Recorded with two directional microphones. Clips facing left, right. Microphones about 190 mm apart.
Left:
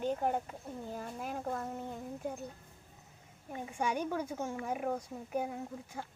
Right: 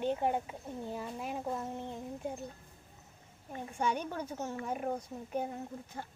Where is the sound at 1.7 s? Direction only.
Centre (ahead or behind).